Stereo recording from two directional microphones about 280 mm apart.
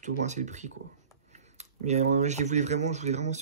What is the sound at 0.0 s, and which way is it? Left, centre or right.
Speech, right.